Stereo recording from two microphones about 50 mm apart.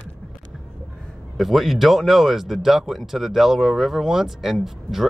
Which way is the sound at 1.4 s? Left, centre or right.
Centre.